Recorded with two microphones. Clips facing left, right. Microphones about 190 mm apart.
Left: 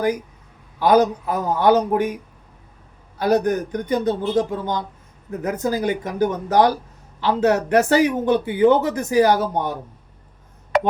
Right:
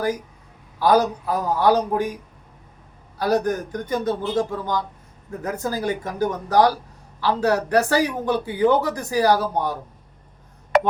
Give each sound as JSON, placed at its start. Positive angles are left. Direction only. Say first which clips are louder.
{"t": 0.8, "sound": "speech", "louder": "left 2 dB", "side_deg": 20}
{"t": 3.2, "sound": "speech", "louder": "left 3 dB", "side_deg": 20}